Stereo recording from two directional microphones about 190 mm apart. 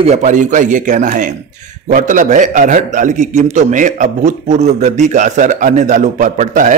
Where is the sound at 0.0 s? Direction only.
35° right (ahead or behind).